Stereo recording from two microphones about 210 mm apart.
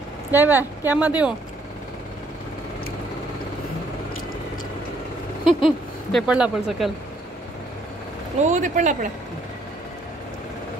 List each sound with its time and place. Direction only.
0.3 s speech: 10° right (ahead or behind)
5.4 s vehicle: 25° left (ahead or behind)
6.1 s speech: 5° right (ahead or behind)
8.4 s speech: 35° right (ahead or behind)